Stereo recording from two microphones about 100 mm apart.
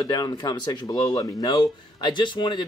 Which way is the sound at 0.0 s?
40° left (ahead or behind).